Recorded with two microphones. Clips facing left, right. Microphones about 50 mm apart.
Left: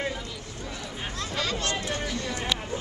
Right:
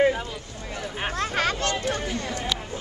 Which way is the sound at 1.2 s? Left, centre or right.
Right.